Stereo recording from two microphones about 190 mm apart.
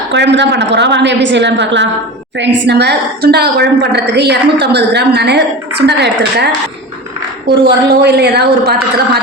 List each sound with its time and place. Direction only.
0.1 s a woman's voice: 65° right (ahead or behind)
7.5 s a woman's voice: 60° right (ahead or behind)